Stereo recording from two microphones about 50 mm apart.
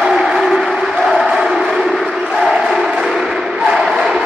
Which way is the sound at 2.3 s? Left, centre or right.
Centre.